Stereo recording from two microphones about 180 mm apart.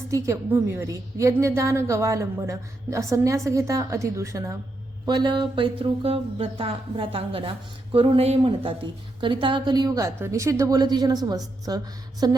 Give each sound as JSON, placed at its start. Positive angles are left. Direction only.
{"t": 0.1, "sound": "a woman's voice", "side_deg": -15}